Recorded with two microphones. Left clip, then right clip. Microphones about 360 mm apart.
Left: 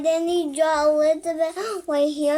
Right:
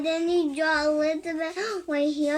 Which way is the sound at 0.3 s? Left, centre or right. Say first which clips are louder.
Left 3 dB; left.